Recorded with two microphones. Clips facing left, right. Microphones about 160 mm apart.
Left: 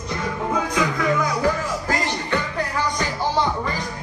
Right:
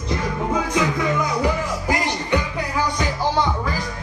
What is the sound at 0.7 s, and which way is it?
Music, 20° right (ahead or behind).